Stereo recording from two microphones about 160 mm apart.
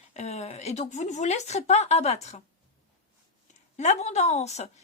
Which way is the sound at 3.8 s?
45° left (ahead or behind).